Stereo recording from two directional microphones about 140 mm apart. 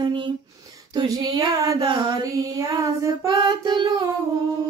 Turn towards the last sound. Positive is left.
turn(degrees=-35)  # may be behind; listen again after turning